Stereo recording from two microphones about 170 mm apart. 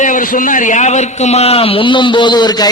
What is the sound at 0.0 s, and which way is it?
A man's voice, 50° left (ahead or behind).